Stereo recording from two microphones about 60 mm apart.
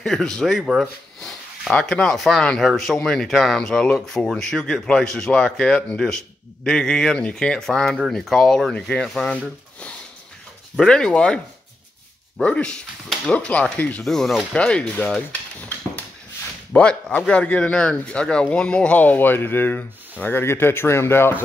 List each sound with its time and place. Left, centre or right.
0.0 s speech: centre
1.8 s speech: centre
10.8 s speech: centre
14.0 s speech: centre
14.6 s speech: centre
16.7 s speech: centre
18.9 s speech: left